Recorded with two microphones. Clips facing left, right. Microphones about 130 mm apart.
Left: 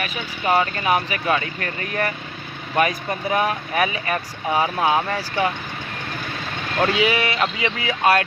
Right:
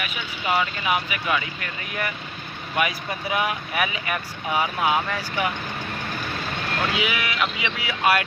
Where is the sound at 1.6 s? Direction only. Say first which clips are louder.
Left 5 dB; 50° left (ahead or behind).